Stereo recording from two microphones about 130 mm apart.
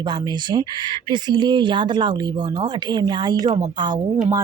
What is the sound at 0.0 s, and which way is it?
Speech, 35° right (ahead or behind).